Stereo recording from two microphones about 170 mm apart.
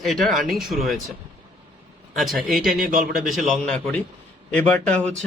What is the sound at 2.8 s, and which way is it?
Speech, 50° right (ahead or behind).